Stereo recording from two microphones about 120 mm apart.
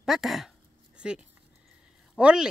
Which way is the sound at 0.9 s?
10° right (ahead or behind).